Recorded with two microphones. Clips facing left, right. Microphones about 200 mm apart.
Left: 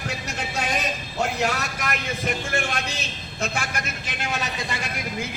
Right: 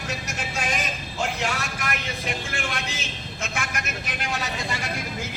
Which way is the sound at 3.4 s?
35° left (ahead or behind).